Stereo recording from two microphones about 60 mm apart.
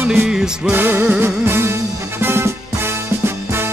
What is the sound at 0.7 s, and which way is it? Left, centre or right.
Music, right.